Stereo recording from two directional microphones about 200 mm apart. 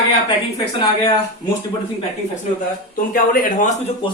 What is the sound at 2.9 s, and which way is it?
Speech, 45° left (ahead or behind).